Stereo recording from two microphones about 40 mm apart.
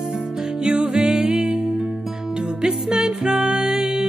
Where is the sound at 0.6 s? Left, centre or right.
Right.